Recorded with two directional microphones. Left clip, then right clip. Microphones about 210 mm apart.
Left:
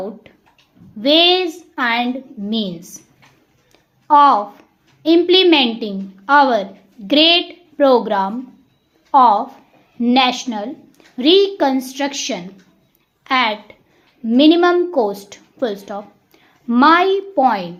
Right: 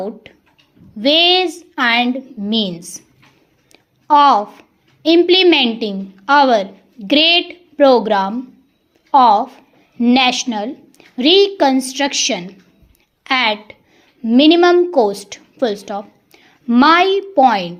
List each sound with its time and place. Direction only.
0.0 s a woman's voice: 20° right (ahead or behind)
3.7 s a sound: 20° right (ahead or behind)
5.0 s a woman's voice: 20° right (ahead or behind)